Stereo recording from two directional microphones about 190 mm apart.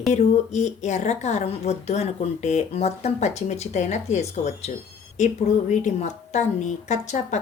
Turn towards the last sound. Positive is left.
turn(degrees=40)  # may be behind; listen again after turning